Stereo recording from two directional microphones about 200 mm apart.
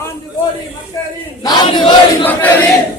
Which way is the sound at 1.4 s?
20° left (ahead or behind).